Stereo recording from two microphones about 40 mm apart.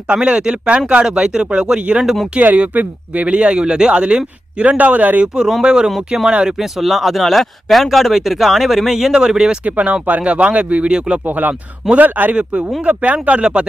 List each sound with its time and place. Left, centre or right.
0.1 s speech: right
2.5 s speech: right
5.2 s speech: centre
5.9 s speech: centre
9.7 s speech: right
11.2 s speech: right
12.4 s speech: right